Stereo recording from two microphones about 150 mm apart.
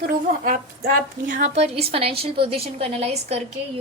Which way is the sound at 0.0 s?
65° right (ahead or behind).